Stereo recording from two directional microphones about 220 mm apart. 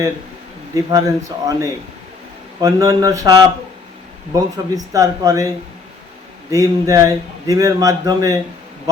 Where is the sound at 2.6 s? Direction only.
15° right (ahead or behind).